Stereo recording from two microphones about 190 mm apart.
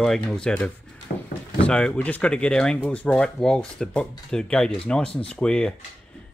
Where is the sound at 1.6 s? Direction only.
5° left (ahead or behind).